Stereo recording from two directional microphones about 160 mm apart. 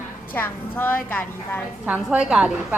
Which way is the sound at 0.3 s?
10° left (ahead or behind).